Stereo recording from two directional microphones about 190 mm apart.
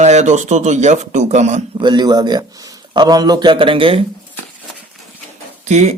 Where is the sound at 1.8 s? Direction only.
25° right (ahead or behind).